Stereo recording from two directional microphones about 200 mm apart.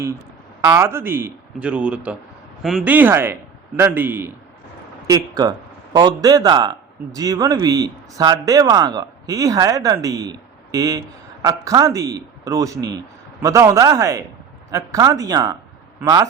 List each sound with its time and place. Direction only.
0.6 s speech: 15° right (ahead or behind)